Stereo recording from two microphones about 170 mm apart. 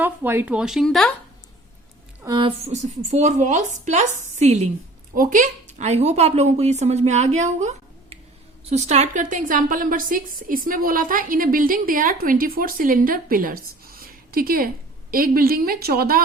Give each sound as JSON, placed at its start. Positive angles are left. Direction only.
{"t": 0.0, "sound": "speech", "side_deg": -10}
{"t": 2.2, "sound": "a woman's voice", "side_deg": -25}
{"t": 2.6, "sound": "speech", "side_deg": -45}
{"t": 5.1, "sound": "a woman's voice", "side_deg": -50}